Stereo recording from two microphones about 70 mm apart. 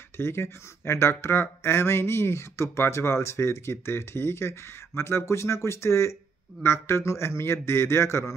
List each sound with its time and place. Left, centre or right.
0.2 s speech: left